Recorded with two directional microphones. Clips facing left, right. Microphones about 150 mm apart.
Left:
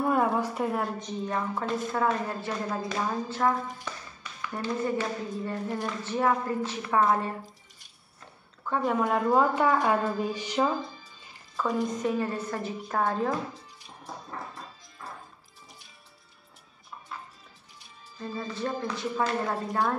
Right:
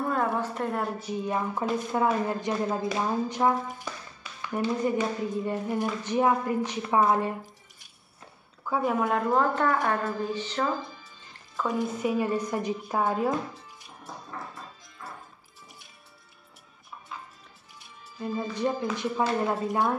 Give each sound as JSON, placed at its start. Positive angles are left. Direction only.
{"t": 0.0, "sound": "a sound", "side_deg": 10}
{"t": 0.8, "sound": "a woman's voice", "side_deg": -10}
{"t": 8.6, "sound": "speech", "side_deg": -5}
{"t": 9.3, "sound": "a woman's voice", "side_deg": 10}
{"t": 11.5, "sound": "a woman's voice", "side_deg": -5}
{"t": 18.2, "sound": "a woman's voice", "side_deg": -15}